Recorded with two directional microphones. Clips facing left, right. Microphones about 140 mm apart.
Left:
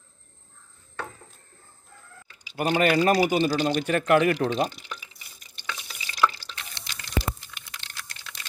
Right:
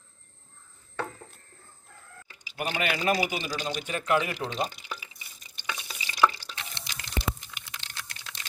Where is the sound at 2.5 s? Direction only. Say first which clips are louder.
Left 8 dB; 45° left (ahead or behind).